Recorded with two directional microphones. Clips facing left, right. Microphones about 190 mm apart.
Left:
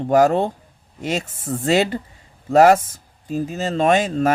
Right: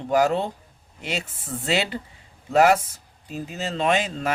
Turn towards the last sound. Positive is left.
turn(degrees=45)  # may be behind; listen again after turning